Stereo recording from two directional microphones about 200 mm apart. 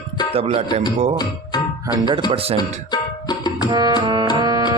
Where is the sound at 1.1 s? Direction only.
20° left (ahead or behind).